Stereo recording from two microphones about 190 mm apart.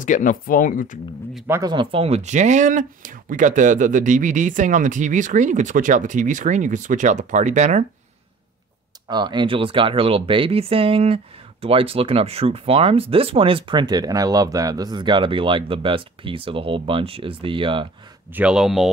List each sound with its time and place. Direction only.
0.0 s speech: 45° left (ahead or behind)
1.5 s speech: 20° right (ahead or behind); by 7.8 s 40° right (ahead or behind)
9.0 s speech: 25° right (ahead or behind)
18.3 s speech: 5° right (ahead or behind)